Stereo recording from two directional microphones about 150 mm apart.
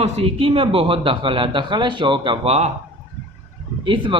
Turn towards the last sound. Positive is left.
turn(degrees=-35)  # may be behind; listen again after turning